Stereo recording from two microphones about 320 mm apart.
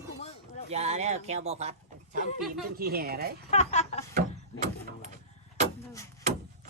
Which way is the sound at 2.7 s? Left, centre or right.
Right.